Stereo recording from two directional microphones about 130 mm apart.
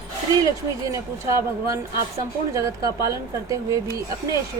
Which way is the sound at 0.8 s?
25° right (ahead or behind).